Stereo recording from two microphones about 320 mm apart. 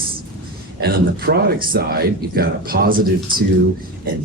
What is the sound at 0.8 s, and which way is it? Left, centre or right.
Speech, right.